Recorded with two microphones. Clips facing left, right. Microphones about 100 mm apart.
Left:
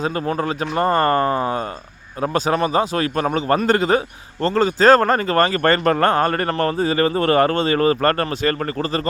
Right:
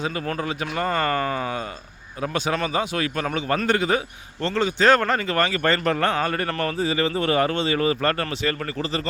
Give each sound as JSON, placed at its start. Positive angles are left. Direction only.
{"t": 0.0, "sound": "a man's voice", "side_deg": 40}